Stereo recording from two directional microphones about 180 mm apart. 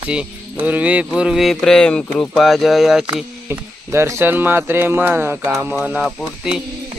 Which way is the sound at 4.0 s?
10° right (ahead or behind).